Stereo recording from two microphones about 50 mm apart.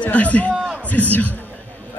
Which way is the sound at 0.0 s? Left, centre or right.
Left.